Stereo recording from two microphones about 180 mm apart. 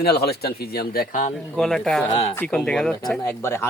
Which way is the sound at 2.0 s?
30° left (ahead or behind).